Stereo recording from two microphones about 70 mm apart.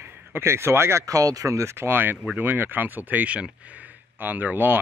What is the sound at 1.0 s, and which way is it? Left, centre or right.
Speech, right.